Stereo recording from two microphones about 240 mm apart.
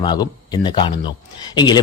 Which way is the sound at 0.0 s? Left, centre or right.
Centre.